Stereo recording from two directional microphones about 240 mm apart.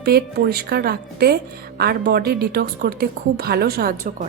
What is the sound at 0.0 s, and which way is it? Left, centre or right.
A woman's voice, right.